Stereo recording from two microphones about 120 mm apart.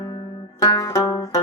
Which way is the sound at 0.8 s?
30° left (ahead or behind).